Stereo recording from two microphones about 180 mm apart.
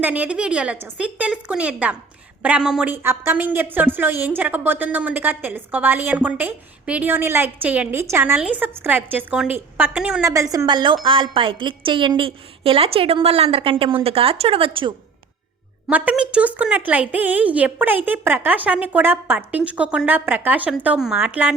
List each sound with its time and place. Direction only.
0.0 s a woman's voice: 10° right (ahead or behind)
10.2 s a woman's voice: 15° right (ahead or behind)
15.9 s a woman's voice: 10° right (ahead or behind)